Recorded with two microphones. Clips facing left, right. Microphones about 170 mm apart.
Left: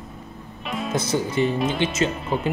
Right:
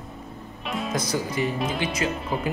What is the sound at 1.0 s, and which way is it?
Speech, 25° left (ahead or behind).